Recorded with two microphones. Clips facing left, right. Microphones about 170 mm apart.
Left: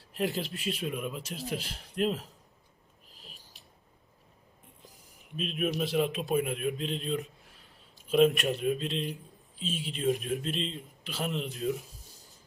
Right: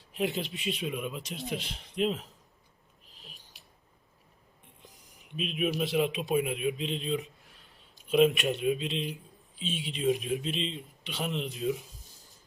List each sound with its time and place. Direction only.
0.1 s speech: centre (ahead or behind)
5.4 s speech: centre (ahead or behind)